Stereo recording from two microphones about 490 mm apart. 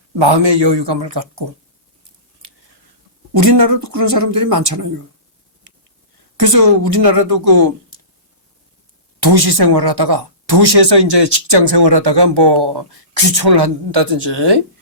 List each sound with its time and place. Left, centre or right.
0.2 s speech: right
3.3 s speech: right
6.4 s speech: right
9.2 s speech: right